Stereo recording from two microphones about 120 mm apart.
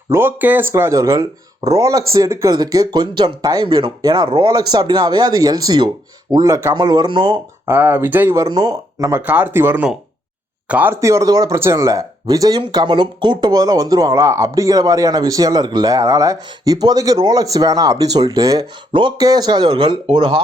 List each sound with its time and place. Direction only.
0.1 s speech: 15° right (ahead or behind); by 3.9 s 45° right (ahead or behind)
4.0 s speech: 35° right (ahead or behind)
6.7 s speech: 35° right (ahead or behind)
7.7 s speech: 15° right (ahead or behind)
8.4 s speech: 35° right (ahead or behind)